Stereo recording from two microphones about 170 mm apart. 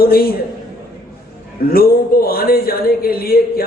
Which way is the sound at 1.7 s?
60° left (ahead or behind).